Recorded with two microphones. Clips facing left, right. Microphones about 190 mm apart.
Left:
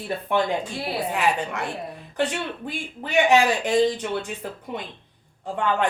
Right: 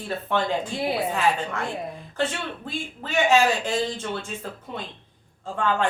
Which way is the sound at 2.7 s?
15° left (ahead or behind).